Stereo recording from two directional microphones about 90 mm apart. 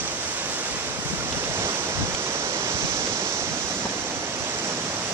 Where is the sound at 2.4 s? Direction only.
30° right (ahead or behind).